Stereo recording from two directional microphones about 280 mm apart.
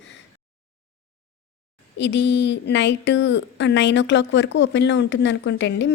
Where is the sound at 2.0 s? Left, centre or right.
Left.